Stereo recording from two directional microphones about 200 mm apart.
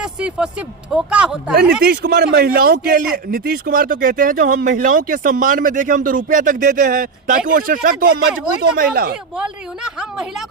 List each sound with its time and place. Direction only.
0.0 s speech: 5° right (ahead or behind)
1.8 s speech: 55° right (ahead or behind)
9.4 s speech: 5° right (ahead or behind)